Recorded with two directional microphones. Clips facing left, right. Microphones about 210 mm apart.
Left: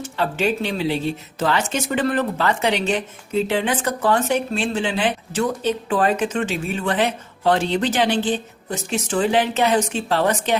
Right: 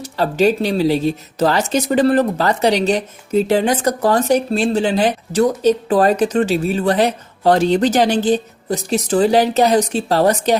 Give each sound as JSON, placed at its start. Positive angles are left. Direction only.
{"t": 0.0, "sound": "speech", "side_deg": -40}